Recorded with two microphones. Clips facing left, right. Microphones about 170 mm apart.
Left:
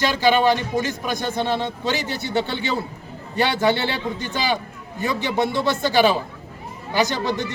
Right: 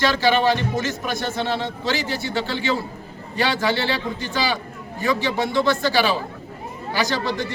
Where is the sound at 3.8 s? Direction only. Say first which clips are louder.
Even; 20° left (ahead or behind).